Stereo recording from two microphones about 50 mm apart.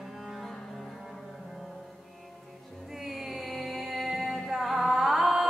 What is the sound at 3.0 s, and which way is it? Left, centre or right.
Music, centre.